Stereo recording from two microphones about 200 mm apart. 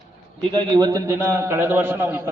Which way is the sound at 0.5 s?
20° right (ahead or behind).